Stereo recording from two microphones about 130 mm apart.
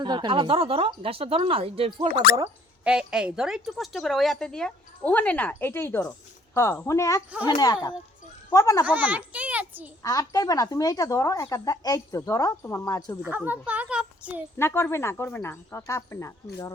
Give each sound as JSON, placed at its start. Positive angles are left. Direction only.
{"t": 0.0, "sound": "speech", "side_deg": -35}
{"t": 2.8, "sound": "a woman's voice", "side_deg": -5}
{"t": 8.9, "sound": "a child's voice", "side_deg": -10}
{"t": 10.0, "sound": "speech", "side_deg": 25}
{"t": 13.3, "sound": "a child's voice", "side_deg": -15}
{"t": 14.6, "sound": "speech", "side_deg": 20}